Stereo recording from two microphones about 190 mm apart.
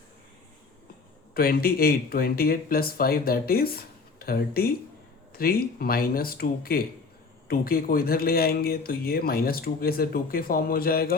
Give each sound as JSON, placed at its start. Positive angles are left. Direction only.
{"t": 1.3, "sound": "speech", "side_deg": 50}